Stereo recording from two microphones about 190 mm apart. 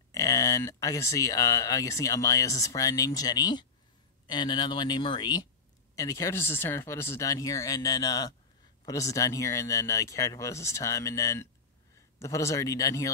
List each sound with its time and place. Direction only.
0.1 s speech: 15° left (ahead or behind)